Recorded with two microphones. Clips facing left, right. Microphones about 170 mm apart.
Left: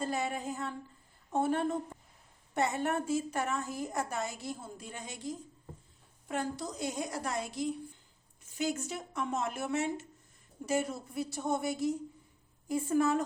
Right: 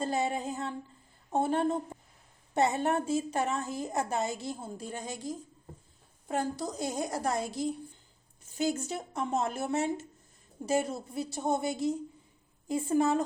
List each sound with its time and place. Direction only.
0.0 s a woman's voice: 25° right (ahead or behind)